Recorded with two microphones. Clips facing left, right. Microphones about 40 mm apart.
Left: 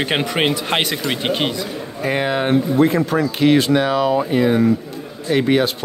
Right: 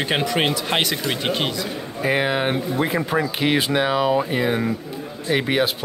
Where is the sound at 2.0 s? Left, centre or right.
Centre.